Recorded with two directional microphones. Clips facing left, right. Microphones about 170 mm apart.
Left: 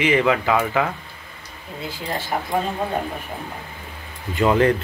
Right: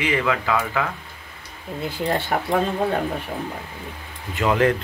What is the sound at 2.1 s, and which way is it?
Speech, 60° right (ahead or behind).